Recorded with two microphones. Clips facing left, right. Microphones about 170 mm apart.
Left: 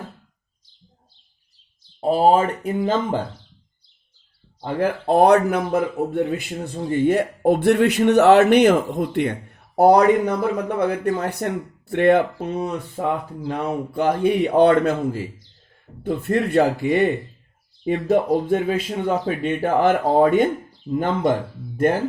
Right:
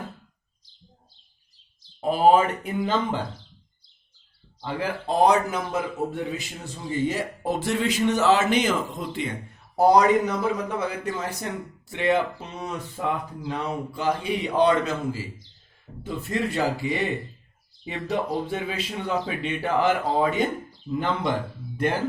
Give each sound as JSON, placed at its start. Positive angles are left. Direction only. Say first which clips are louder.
{"t": 2.0, "sound": "speech", "louder": "left 2 dB", "side_deg": 35}
{"t": 4.6, "sound": "speech", "louder": "left 7 dB", "side_deg": 55}